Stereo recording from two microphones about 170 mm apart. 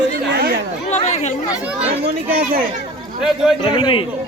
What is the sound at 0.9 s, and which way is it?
Chatter, 45° left (ahead or behind).